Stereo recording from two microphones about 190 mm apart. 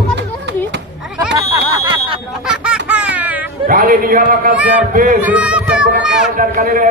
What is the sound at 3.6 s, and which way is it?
Speech, 50° right (ahead or behind).